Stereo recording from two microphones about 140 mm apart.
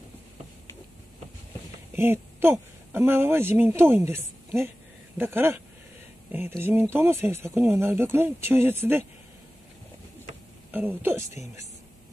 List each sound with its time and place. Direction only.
2.0 s speech: 15° right (ahead or behind)
6.6 s speech: 15° right (ahead or behind)
10.7 s speech: 15° right (ahead or behind)